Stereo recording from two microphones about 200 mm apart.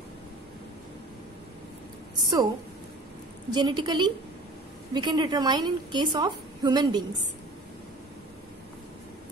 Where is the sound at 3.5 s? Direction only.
20° right (ahead or behind).